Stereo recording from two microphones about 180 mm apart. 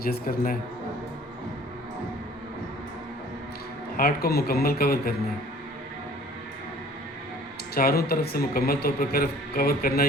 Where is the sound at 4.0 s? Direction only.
55° left (ahead or behind).